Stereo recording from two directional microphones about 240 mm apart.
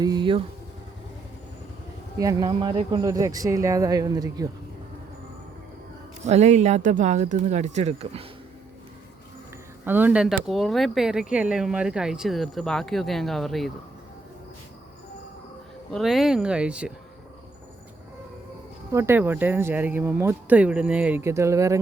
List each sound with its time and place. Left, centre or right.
0.0 s speech: centre
2.1 s speech: centre
6.2 s speech: right
9.8 s speech: centre
15.9 s speech: centre
18.9 s speech: centre